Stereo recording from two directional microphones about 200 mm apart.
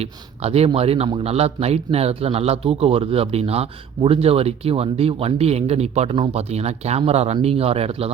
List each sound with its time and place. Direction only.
0.0 s a man's voice: 30° right (ahead or behind)